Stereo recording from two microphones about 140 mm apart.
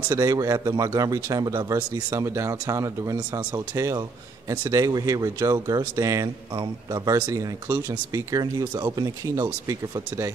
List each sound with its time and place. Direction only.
0.1 s speech: 25° right (ahead or behind)